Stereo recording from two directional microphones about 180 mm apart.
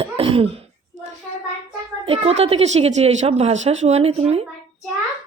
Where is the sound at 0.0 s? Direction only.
30° right (ahead or behind).